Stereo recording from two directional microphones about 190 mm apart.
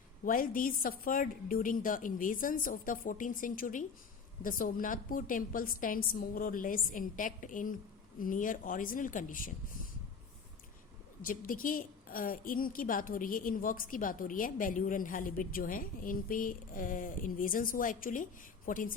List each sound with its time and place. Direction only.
0.3 s a woman's voice: 45° left (ahead or behind)
11.2 s a woman's voice: 45° left (ahead or behind)